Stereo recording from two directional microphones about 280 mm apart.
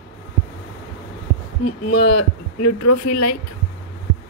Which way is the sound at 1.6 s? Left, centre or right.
Left.